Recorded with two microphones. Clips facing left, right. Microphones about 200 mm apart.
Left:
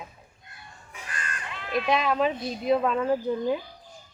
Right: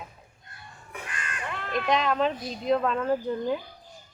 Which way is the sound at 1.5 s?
55° right (ahead or behind).